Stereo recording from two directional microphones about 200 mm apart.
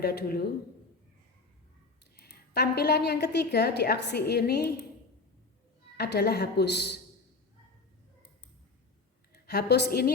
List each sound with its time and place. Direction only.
0.0 s a woman's voice: 55° left (ahead or behind)
2.1 s a woman's voice: 50° left (ahead or behind)
6.0 s a woman's voice: 55° left (ahead or behind)
9.5 s a woman's voice: 55° left (ahead or behind)